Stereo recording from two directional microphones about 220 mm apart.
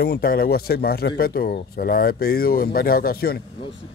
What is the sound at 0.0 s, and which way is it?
A man's voice, 45° left (ahead or behind).